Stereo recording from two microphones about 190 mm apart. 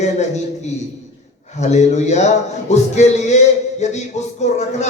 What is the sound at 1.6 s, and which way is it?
A man's voice, 35° left (ahead or behind).